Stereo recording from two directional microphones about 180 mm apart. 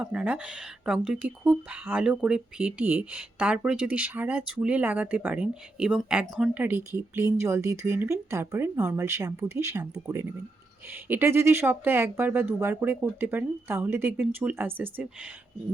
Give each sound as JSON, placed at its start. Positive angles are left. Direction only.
{"t": 0.0, "sound": "speech", "side_deg": -5}